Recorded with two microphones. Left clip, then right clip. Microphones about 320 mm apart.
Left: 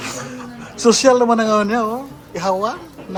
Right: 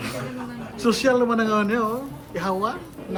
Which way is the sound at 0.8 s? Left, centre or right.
Centre.